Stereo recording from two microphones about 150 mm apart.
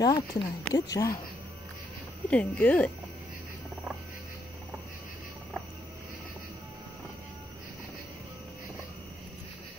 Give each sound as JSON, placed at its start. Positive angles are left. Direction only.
{"t": 0.0, "sound": "speech", "side_deg": 30}
{"t": 2.2, "sound": "speech", "side_deg": 10}